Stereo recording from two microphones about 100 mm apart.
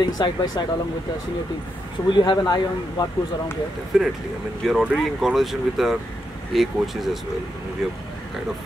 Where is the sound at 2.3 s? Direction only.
45° left (ahead or behind).